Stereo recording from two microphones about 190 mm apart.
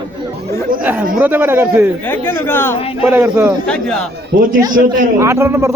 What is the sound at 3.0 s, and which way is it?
Speech, 10° right (ahead or behind).